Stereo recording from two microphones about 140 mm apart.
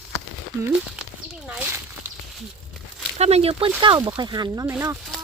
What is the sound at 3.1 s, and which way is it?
Speech, 50° right (ahead or behind).